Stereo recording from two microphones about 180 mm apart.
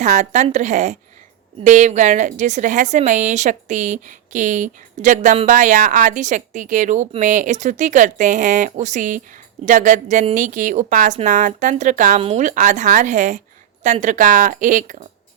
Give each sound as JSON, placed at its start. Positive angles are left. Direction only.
{"t": 0.0, "sound": "a woman's voice", "side_deg": -40}